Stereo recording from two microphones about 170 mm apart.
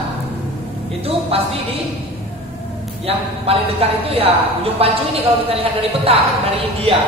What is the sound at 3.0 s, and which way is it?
A woman's voice, 35° right (ahead or behind).